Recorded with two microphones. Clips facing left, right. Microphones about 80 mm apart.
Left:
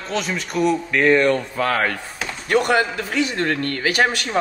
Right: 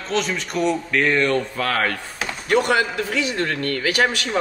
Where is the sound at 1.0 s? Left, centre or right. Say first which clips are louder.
Left 4 dB; centre.